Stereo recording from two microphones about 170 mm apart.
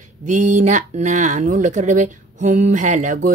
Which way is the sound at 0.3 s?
45° right (ahead or behind).